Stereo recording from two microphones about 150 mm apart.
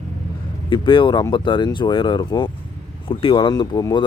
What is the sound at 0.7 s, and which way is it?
Speech, 35° left (ahead or behind).